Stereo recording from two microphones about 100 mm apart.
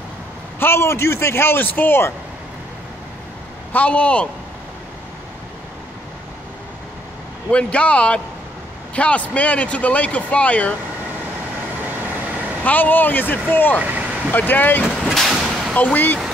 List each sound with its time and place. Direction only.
0.6 s a man's voice: 25° left (ahead or behind)
3.7 s speech: 15° left (ahead or behind)
7.5 s speech: 10° left (ahead or behind)
12.6 s a man's voice: 15° left (ahead or behind)
13.7 s vehicle: 15° right (ahead or behind)
14.3 s a man's voice: 20° left (ahead or behind)
15.0 s vehicle: 5° right (ahead or behind)
15.7 s speech: 15° left (ahead or behind)